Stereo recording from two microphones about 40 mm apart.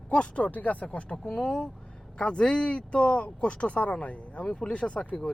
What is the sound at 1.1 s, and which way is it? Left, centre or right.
Speech, left.